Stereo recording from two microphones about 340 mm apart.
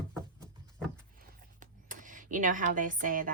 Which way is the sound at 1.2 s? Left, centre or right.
Right.